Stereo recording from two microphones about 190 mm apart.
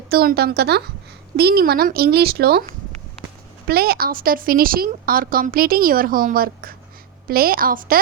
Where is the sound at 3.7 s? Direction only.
55° right (ahead or behind).